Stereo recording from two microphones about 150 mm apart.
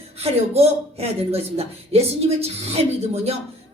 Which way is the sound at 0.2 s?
45° right (ahead or behind).